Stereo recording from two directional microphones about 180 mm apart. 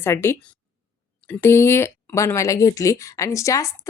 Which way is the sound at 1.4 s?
15° left (ahead or behind).